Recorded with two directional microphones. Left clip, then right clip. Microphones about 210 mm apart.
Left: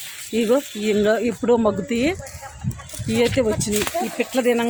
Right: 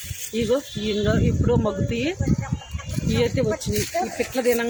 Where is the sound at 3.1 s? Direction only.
45° left (ahead or behind).